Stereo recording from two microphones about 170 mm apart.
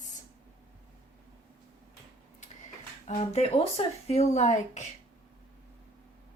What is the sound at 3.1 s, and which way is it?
Speech, 35° left (ahead or behind).